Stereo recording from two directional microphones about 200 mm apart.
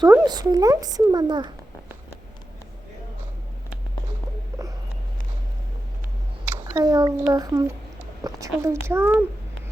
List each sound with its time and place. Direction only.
0.0 s speech: 20° right (ahead or behind)
6.7 s a woman's voice: 20° right (ahead or behind)